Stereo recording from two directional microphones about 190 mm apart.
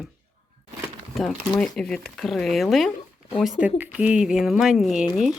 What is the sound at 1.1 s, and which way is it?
Speech, centre (ahead or behind).